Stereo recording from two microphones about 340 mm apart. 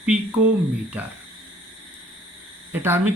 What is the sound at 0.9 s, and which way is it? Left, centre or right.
Speech, centre.